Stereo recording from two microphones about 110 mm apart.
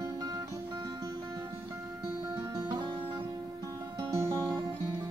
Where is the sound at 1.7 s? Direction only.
15° right (ahead or behind).